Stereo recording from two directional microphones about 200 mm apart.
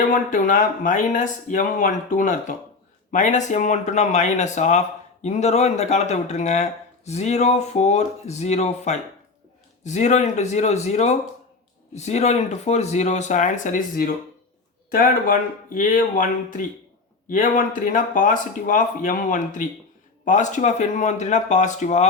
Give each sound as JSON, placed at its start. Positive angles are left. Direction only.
{"t": 0.1, "sound": "speech", "side_deg": 40}